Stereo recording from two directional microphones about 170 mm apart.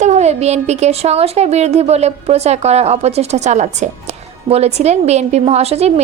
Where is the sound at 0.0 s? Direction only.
40° right (ahead or behind).